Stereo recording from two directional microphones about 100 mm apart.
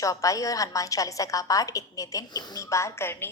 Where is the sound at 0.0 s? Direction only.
35° left (ahead or behind).